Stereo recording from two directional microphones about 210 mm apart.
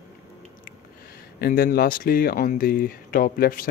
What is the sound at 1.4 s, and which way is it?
Speech, 45° left (ahead or behind).